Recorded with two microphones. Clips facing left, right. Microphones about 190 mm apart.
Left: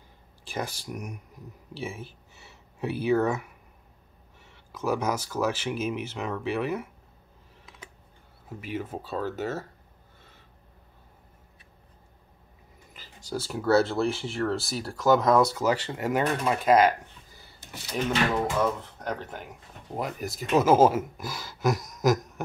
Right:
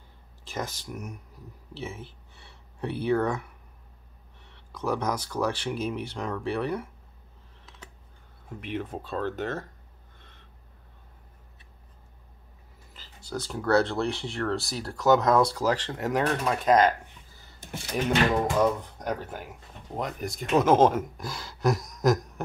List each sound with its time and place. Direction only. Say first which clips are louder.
0.5 s speech: left 1 dB; 10° left (ahead or behind)
8.5 s speech: even; 5° left (ahead or behind)
10.1 s a sound: left 1 dB; 5° left (ahead or behind)
12.9 s speech: left 1 dB; 15° left (ahead or behind)
18.6 s speech: right 3 dB; 15° right (ahead or behind); by 22.4 s centre (ahead or behind)